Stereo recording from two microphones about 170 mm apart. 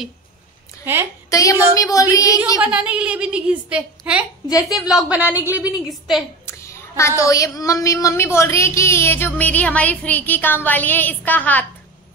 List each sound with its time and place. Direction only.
1.3 s speech: 20° left (ahead or behind)
2.6 s a woman's voice: 5° right (ahead or behind)
4.5 s speech: 20° left (ahead or behind)
4.7 s a woman's voice: 5° right (ahead or behind)
6.4 s speech: 15° left (ahead or behind)